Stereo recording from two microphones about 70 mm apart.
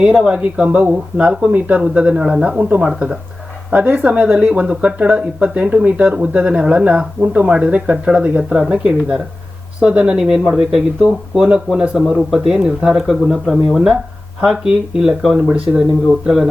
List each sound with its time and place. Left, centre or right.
0.0 s speech: centre
12.5 s speech: centre
12.9 s speech: centre
14.4 s speech: centre
16.2 s speech: centre